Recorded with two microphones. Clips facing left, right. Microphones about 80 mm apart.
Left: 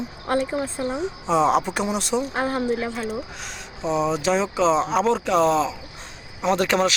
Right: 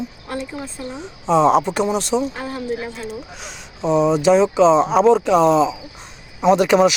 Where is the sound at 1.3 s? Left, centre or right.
Centre.